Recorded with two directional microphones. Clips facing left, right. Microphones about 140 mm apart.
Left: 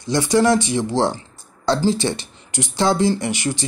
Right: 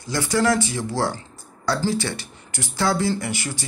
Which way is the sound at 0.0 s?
20° left (ahead or behind).